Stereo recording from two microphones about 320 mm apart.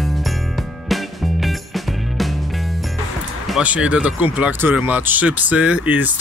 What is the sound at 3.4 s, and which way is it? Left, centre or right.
Speech, centre.